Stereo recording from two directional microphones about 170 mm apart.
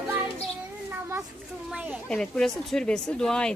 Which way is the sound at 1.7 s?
5° right (ahead or behind).